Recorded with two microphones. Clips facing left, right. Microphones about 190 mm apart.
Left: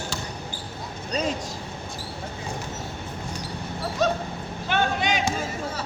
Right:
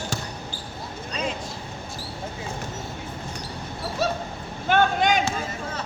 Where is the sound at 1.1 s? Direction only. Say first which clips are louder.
Left 3 dB; 40° left (ahead or behind).